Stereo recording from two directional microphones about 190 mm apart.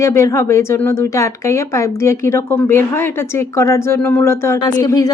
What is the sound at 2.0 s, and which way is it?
Speech, 15° left (ahead or behind).